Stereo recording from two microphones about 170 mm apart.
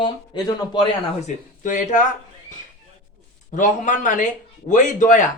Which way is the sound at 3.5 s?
50° left (ahead or behind).